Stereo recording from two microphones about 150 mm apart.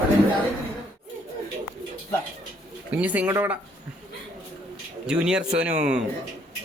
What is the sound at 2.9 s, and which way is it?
Speech, 10° right (ahead or behind).